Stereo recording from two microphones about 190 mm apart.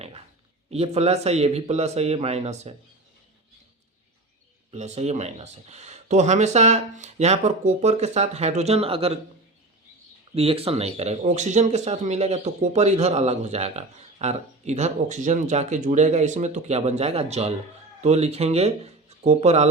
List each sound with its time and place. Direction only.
0.7 s speech: 35° right (ahead or behind)
4.7 s speech: 35° right (ahead or behind)
10.3 s speech: 30° right (ahead or behind)